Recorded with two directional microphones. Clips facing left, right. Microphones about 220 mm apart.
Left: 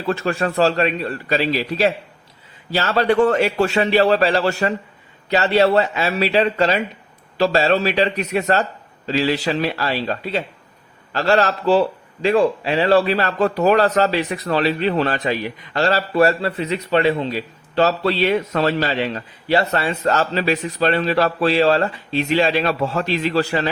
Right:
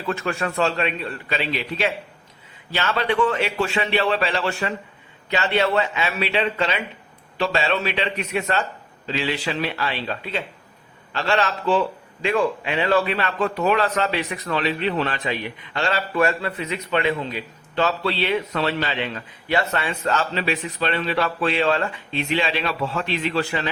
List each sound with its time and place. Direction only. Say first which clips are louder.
0.0 s speech: left 4 dB; 35° left (ahead or behind)